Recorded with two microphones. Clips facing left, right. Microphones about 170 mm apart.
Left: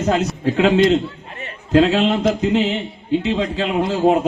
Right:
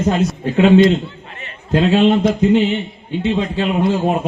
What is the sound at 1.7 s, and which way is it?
Speech, 90° left.